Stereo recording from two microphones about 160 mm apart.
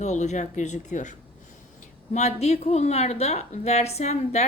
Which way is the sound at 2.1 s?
45° left (ahead or behind).